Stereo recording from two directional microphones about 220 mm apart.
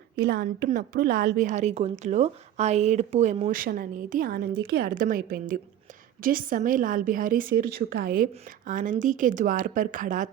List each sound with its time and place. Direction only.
0.2 s a woman's voice: 45° right (ahead or behind)